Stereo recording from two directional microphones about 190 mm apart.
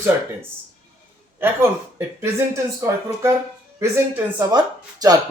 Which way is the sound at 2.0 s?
15° right (ahead or behind).